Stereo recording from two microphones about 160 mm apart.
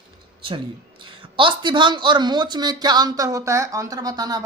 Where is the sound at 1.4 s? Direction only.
30° right (ahead or behind).